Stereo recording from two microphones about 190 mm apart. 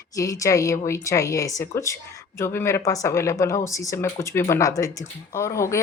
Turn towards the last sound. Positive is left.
turn(degrees=15)  # may be behind; listen again after turning